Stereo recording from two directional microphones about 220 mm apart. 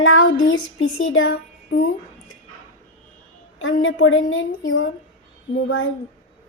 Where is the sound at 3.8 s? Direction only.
60° left (ahead or behind).